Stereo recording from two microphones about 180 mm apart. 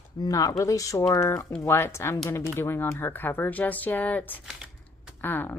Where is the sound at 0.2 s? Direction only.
20° left (ahead or behind).